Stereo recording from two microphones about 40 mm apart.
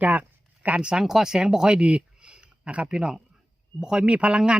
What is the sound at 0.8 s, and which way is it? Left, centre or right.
Speech, right.